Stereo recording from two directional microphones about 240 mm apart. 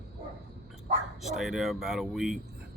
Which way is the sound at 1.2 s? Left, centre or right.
Centre.